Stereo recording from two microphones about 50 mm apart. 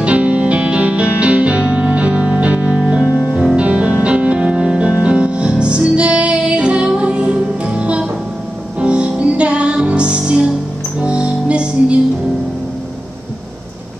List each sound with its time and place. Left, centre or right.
0.0 s music: right